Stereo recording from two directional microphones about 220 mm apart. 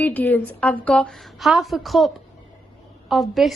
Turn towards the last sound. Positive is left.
turn(degrees=0)  # may be behind; listen again after turning